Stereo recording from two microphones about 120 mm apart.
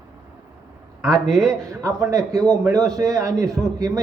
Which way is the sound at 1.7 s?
25° right (ahead or behind).